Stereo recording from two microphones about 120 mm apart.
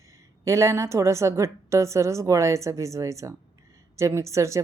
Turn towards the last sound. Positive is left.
turn(degrees=-25)  # may be behind; listen again after turning